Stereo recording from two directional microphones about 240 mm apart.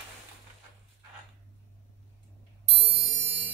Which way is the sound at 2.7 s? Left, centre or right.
Right.